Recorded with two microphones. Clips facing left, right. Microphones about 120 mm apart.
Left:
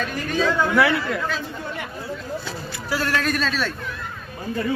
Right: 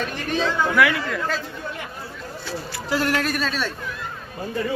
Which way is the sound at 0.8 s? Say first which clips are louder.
Left 1 dB; 30° left (ahead or behind).